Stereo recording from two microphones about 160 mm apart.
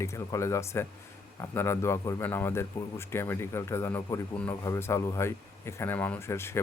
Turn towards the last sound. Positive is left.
turn(degrees=15)  # may be behind; listen again after turning